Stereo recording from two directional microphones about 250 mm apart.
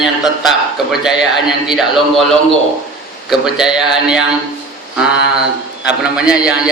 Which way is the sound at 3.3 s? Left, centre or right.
Centre.